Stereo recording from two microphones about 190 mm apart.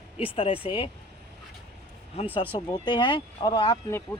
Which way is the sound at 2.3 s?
25° left (ahead or behind).